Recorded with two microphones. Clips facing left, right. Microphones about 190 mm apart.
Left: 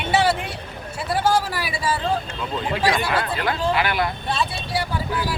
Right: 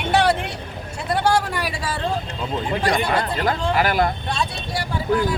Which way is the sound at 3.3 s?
40° right (ahead or behind).